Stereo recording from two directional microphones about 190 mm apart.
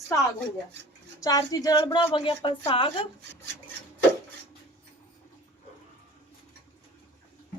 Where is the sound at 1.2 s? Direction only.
20° left (ahead or behind).